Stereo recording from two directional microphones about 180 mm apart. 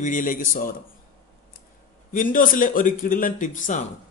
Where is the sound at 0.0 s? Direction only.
45° left (ahead or behind).